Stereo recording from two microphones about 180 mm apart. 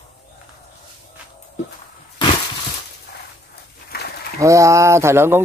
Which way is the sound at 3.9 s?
60° left (ahead or behind).